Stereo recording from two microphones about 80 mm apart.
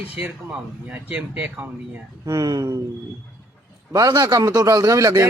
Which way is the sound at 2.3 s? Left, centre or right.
Right.